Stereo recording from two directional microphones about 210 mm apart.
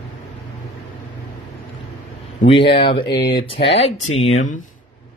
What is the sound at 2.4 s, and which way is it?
Speech, 25° left (ahead or behind).